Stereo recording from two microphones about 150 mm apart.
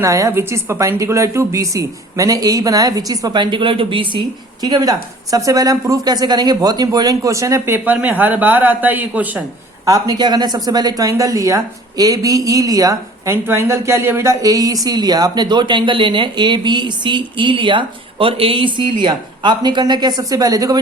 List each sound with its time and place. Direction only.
0.0 s a woman's voice: 20° right (ahead or behind)
9.8 s a woman's voice: 25° right (ahead or behind)